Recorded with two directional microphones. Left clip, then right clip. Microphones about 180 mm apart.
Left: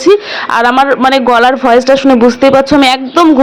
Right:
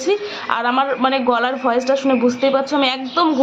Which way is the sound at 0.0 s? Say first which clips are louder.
Left 11 dB; 45° left (ahead or behind).